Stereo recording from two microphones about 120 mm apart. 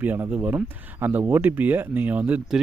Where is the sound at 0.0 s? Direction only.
15° right (ahead or behind).